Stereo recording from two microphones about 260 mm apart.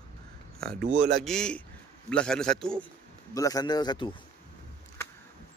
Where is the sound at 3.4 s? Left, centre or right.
Centre.